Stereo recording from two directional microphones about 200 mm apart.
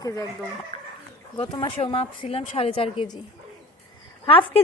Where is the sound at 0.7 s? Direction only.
30° left (ahead or behind).